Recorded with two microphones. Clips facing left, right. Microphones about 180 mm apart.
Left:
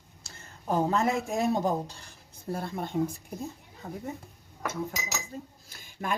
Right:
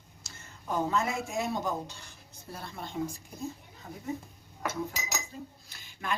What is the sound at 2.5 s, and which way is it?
Speech, 50° left (ahead or behind).